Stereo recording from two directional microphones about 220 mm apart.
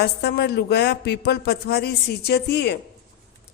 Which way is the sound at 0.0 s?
45° left (ahead or behind).